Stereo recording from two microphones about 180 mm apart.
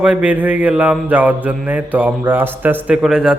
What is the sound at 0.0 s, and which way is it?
Mantra, 5° right (ahead or behind).